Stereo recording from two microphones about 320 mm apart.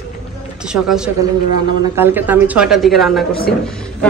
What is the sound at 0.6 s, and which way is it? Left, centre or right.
A woman's voice, centre.